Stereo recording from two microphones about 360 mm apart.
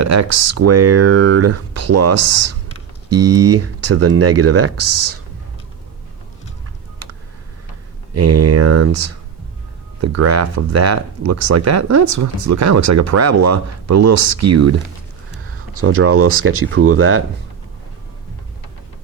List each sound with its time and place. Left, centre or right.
0.0 s speech: right
8.1 s speech: right
10.0 s speech: right
15.8 s speech: right